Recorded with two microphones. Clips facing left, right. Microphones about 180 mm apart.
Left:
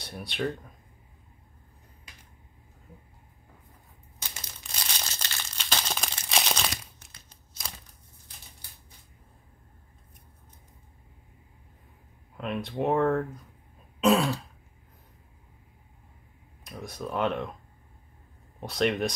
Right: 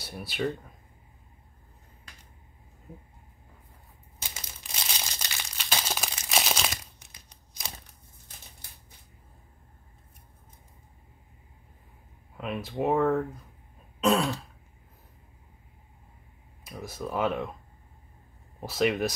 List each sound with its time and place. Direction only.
0.0 s speech: 5° right (ahead or behind)
4.7 s crumpling: 10° right (ahead or behind)
7.1 s crumpling: 15° right (ahead or behind)
12.4 s speech: 5° right (ahead or behind)
16.6 s speech: 5° right (ahead or behind)
18.6 s speech: 5° right (ahead or behind)